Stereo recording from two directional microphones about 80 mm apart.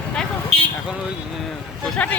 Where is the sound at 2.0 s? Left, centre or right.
Centre.